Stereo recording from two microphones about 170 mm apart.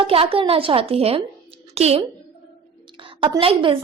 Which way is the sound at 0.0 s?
35° right (ahead or behind).